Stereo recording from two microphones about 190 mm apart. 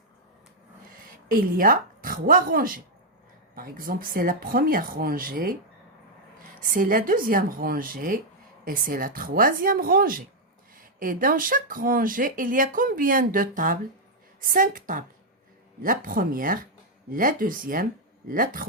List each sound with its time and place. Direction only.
1.3 s speech: 50° right (ahead or behind)
6.6 s speech: 45° right (ahead or behind)